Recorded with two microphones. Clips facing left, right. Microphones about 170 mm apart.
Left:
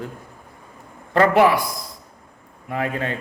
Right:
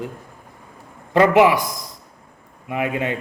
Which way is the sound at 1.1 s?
15° right (ahead or behind).